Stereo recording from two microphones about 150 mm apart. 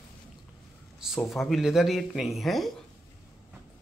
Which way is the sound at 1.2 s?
Centre (ahead or behind).